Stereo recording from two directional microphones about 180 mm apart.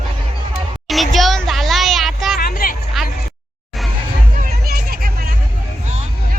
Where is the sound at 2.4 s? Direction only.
55° left (ahead or behind).